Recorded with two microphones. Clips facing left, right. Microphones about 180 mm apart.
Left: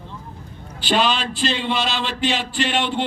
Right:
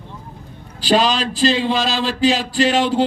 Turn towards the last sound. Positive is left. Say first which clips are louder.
# right 6 dB
turn(degrees=-35)  # may be behind; listen again after turning